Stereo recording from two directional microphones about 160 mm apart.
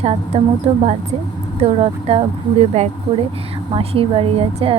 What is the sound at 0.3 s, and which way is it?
Speech, 40° right (ahead or behind).